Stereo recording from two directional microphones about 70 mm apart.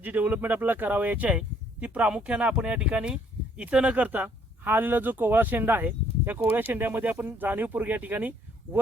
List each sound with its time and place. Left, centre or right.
0.0 s speech: right